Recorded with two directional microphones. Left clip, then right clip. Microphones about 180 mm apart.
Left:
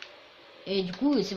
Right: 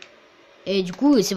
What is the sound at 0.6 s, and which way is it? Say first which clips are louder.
Speech: right 8 dB; 55° right (ahead or behind).